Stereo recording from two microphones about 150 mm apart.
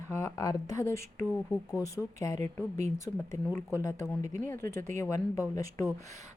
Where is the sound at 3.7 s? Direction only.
20° left (ahead or behind).